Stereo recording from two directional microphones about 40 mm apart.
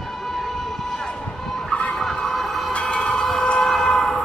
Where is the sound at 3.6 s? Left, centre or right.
Centre.